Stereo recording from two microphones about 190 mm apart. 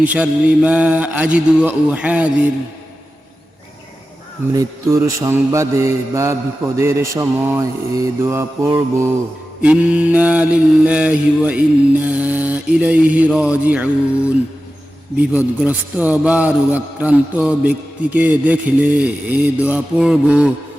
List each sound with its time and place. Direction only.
0.0 s a man's voice: 5° right (ahead or behind)
4.5 s a man's voice: 15° right (ahead or behind)